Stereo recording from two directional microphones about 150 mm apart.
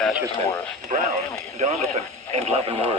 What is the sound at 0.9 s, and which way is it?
Speech, 50° right (ahead or behind).